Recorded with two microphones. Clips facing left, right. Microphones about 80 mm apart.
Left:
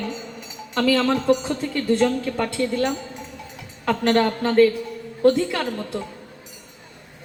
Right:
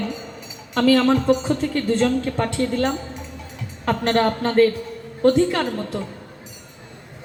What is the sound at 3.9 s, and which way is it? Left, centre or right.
A man's voice, right.